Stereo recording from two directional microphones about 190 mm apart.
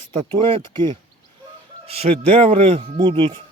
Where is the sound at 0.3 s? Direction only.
30° right (ahead or behind).